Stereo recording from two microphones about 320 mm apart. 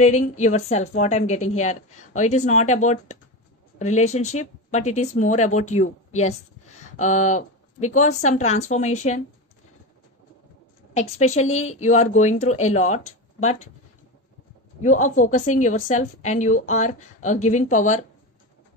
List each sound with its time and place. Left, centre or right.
0.0 s a woman's voice: left
10.9 s a woman's voice: left
14.8 s a woman's voice: left